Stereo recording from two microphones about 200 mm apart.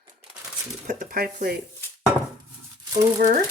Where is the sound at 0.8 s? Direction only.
45° right (ahead or behind).